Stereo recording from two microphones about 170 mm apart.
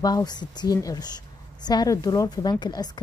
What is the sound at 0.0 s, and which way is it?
A woman's voice, 25° left (ahead or behind).